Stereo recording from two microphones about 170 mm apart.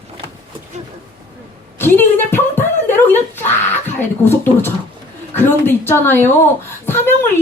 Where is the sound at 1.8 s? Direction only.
15° left (ahead or behind).